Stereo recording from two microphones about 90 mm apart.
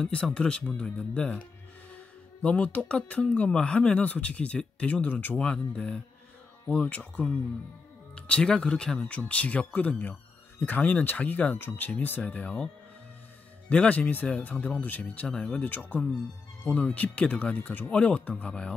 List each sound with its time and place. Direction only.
0.0 s speech: 10° left (ahead or behind)
2.4 s speech: 15° left (ahead or behind)
13.7 s speech: 15° left (ahead or behind)